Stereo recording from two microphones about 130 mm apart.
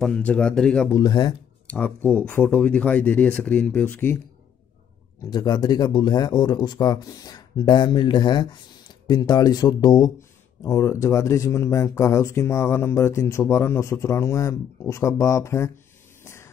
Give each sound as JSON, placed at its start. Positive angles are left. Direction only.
{"t": 0.0, "sound": "speech", "side_deg": 10}
{"t": 0.8, "sound": "speech", "side_deg": 30}
{"t": 1.7, "sound": "speech", "side_deg": 10}
{"t": 5.2, "sound": "speech", "side_deg": 30}